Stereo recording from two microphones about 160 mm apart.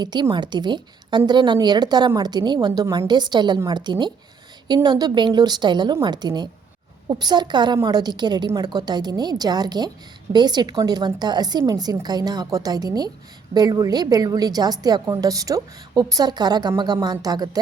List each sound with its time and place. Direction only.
0.0 s a woman's voice: 30° right (ahead or behind)